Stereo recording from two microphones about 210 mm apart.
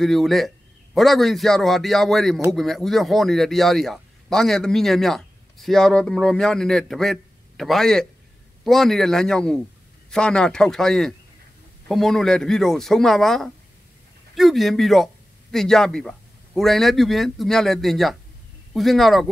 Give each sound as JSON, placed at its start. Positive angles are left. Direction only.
{"t": 0.0, "sound": "speech", "side_deg": 0}